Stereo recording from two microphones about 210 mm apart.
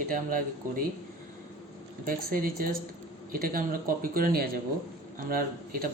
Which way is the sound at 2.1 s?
40° right (ahead or behind).